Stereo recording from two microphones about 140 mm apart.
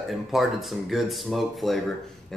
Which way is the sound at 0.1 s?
Centre (ahead or behind).